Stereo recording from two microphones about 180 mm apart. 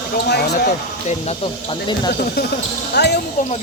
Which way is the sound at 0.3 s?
65° left (ahead or behind).